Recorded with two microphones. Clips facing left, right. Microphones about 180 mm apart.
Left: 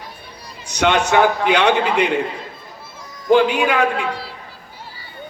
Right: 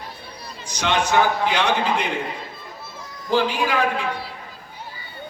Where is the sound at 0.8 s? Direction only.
70° left (ahead or behind).